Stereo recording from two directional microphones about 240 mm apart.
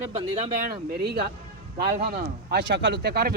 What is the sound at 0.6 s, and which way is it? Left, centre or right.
Speech, right.